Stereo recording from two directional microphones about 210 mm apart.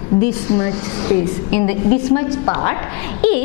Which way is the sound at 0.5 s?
25° left (ahead or behind).